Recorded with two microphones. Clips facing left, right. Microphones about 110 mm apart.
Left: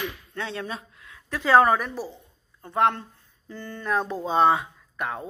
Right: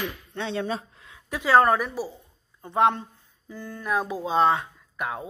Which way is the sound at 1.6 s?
Centre (ahead or behind).